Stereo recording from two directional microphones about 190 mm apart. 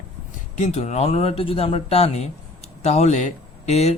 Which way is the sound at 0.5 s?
35° left (ahead or behind).